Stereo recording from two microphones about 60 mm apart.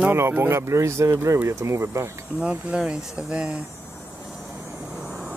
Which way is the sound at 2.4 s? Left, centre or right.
Centre.